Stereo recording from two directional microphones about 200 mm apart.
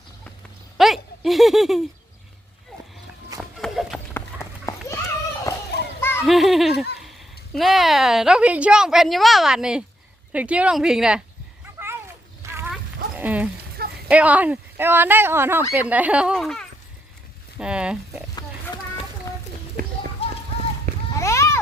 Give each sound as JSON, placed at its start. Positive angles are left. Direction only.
{"t": 0.8, "sound": "a sound", "side_deg": 0}
{"t": 3.6, "sound": "run", "side_deg": 0}
{"t": 4.1, "sound": "horse", "side_deg": 15}
{"t": 6.0, "sound": "children playing", "side_deg": 10}
{"t": 6.2, "sound": "speech", "side_deg": 0}
{"t": 11.6, "sound": "a sound", "side_deg": -10}
{"t": 14.1, "sound": "speech", "side_deg": -5}
{"t": 20.2, "sound": "clip-clop", "side_deg": 30}
{"t": 21.2, "sound": "a sound", "side_deg": 15}